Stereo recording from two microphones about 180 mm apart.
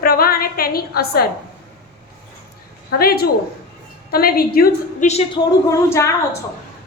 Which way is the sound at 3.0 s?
55° left (ahead or behind).